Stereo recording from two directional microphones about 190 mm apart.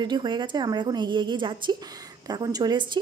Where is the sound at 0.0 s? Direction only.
25° right (ahead or behind).